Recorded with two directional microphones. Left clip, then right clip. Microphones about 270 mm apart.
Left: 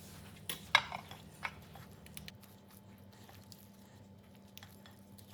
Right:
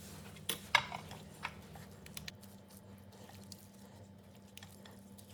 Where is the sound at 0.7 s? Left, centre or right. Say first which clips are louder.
Left 2 dB; centre.